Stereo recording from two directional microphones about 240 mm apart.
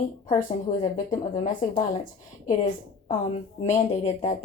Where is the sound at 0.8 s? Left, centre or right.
Left.